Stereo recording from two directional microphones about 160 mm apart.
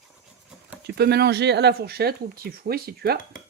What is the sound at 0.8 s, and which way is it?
Speech, 90° right.